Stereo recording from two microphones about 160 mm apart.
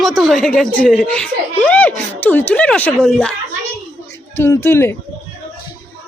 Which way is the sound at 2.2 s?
10° left (ahead or behind).